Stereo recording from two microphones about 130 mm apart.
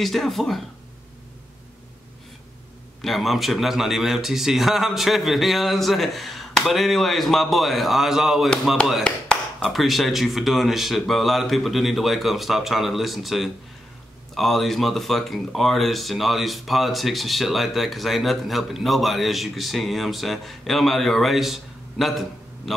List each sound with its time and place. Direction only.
0.0 s a man's voice: centre (ahead or behind)
3.0 s a man's voice: centre (ahead or behind)